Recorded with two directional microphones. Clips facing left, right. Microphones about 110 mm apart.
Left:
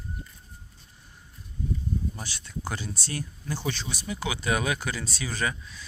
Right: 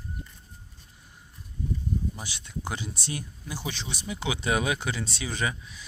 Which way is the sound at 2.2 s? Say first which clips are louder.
Even; 15° right (ahead or behind).